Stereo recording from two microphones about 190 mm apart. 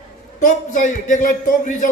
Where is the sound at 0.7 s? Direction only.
40° left (ahead or behind).